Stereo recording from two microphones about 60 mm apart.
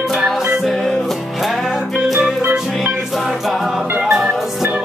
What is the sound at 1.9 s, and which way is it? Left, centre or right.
Music, centre.